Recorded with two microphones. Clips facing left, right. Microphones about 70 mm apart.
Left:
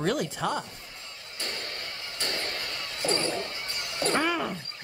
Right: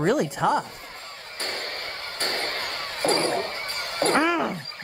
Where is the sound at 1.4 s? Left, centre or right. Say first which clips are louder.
Right 5 dB; right.